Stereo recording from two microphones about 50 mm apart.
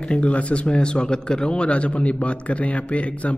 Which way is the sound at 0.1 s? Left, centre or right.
Left.